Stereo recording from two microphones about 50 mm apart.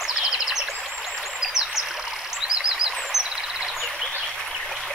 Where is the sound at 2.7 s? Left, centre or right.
Centre.